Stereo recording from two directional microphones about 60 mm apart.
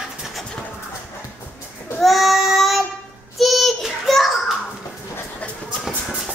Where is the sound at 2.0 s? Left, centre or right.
Centre.